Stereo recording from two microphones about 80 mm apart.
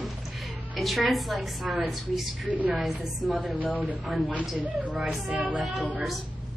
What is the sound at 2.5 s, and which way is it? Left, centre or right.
Speech, centre.